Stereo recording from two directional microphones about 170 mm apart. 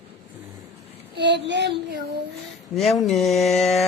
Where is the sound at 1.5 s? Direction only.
90° right.